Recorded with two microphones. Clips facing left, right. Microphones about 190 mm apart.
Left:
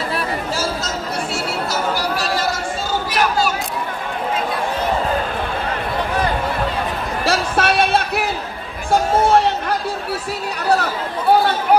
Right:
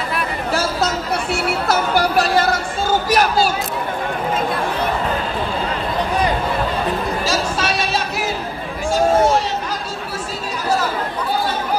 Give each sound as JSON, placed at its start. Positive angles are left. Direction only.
{"t": 0.5, "sound": "chatter", "side_deg": -60}
{"t": 7.2, "sound": "a sound", "side_deg": 60}
{"t": 10.7, "sound": "chatter", "side_deg": 65}